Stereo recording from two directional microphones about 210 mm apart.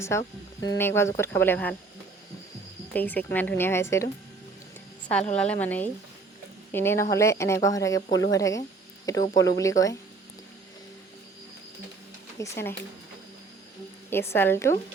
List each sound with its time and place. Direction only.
0.0 s speech: 15° left (ahead or behind)
2.9 s speech: 10° left (ahead or behind)
5.4 s speech: 5° left (ahead or behind)
12.4 s speech: 10° left (ahead or behind)
14.1 s speech: 10° left (ahead or behind)